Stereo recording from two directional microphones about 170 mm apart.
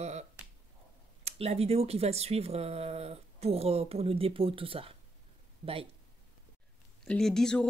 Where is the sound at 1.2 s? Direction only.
35° right (ahead or behind).